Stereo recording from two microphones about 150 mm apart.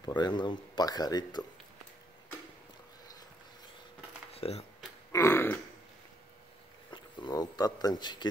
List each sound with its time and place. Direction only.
0.0 s speech: 30° left (ahead or behind)
4.3 s speech: 40° left (ahead or behind)
5.1 s burping: 20° left (ahead or behind)
6.9 s speech: 30° left (ahead or behind)